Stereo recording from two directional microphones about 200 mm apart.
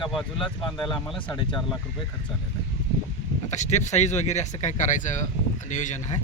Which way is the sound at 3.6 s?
35° left (ahead or behind).